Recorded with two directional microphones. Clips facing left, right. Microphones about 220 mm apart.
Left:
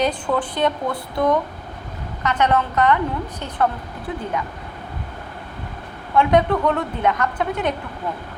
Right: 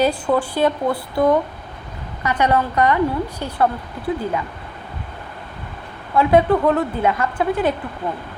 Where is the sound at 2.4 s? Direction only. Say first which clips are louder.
Right 1 dB; 10° right (ahead or behind).